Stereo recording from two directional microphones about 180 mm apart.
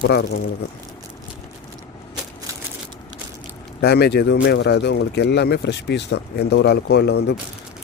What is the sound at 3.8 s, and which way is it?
Speech, 65° left (ahead or behind).